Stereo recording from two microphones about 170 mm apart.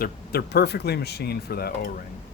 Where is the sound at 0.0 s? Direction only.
65° left (ahead or behind).